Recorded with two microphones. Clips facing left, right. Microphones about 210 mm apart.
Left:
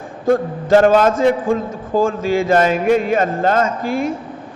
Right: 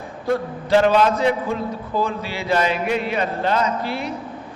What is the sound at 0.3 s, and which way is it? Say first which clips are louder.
A man's voice: left 6 dB; 45° left (ahead or behind).